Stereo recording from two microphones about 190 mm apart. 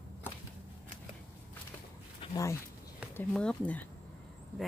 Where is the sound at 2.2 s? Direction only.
20° left (ahead or behind).